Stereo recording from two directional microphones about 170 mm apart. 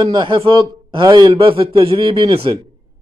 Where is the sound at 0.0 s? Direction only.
25° right (ahead or behind).